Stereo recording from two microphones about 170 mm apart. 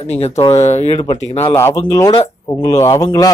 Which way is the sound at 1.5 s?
15° left (ahead or behind).